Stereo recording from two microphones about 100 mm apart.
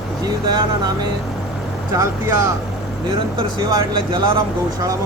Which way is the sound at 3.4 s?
50° right (ahead or behind).